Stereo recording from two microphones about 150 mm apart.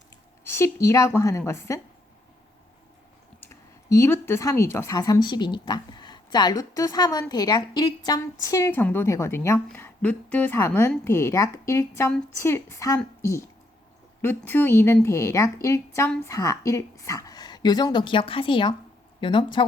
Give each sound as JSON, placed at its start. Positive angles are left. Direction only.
{"t": 0.4, "sound": "a woman's voice", "side_deg": 15}
{"t": 3.4, "sound": "speech", "side_deg": 20}
{"t": 4.9, "sound": "a woman's voice", "side_deg": 25}
{"t": 14.2, "sound": "a woman's voice", "side_deg": 15}